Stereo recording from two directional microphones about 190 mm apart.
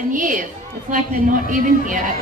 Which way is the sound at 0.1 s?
45° right (ahead or behind).